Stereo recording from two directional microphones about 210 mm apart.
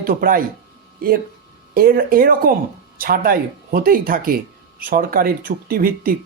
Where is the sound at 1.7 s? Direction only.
45° right (ahead or behind).